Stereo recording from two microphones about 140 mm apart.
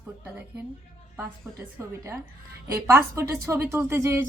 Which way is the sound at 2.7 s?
20° right (ahead or behind).